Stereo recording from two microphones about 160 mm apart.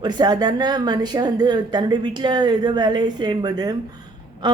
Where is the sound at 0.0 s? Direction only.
25° right (ahead or behind).